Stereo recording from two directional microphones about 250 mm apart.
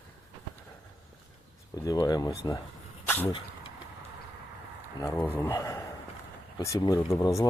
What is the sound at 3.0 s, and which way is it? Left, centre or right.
Dog, centre.